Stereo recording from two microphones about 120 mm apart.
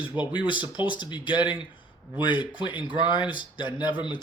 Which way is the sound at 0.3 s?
45° left (ahead or behind).